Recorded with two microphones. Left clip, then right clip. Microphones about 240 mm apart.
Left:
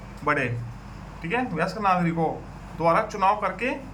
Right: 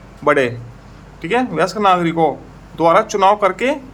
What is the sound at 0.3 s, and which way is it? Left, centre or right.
A man's voice, right.